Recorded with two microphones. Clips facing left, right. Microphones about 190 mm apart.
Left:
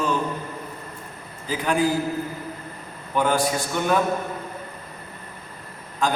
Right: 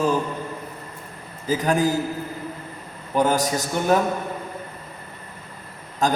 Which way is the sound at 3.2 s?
40° right (ahead or behind).